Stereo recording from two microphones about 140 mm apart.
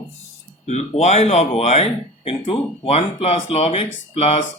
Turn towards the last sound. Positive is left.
turn(degrees=45)  # may be behind; listen again after turning